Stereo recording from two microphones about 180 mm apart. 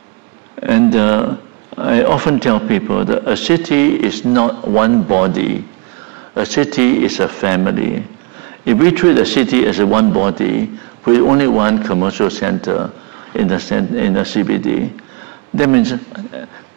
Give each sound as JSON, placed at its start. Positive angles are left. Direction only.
{"t": 0.6, "sound": "speech", "side_deg": -15}
{"t": 9.2, "sound": "speech", "side_deg": -10}